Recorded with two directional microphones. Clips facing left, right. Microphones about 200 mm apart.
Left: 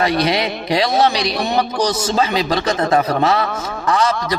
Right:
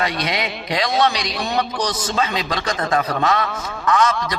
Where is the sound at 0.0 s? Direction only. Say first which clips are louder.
Left 6 dB; 30° left (ahead or behind).